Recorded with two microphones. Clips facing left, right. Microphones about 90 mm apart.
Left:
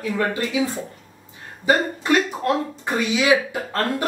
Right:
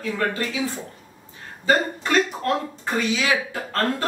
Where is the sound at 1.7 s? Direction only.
15° left (ahead or behind).